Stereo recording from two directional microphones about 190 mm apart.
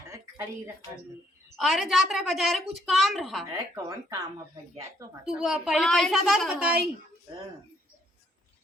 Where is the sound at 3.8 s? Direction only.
15° right (ahead or behind).